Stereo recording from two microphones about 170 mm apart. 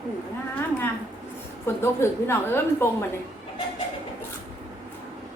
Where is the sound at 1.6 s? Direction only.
15° left (ahead or behind).